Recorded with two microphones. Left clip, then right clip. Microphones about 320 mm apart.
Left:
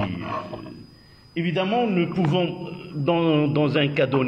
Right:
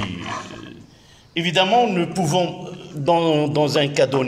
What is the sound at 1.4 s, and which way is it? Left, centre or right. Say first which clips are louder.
A man's voice: right 7 dB; right.